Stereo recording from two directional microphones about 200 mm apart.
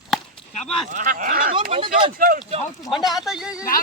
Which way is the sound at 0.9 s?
40° right (ahead or behind).